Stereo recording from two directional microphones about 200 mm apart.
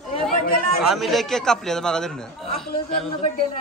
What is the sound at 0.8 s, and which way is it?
A man's voice, centre (ahead or behind).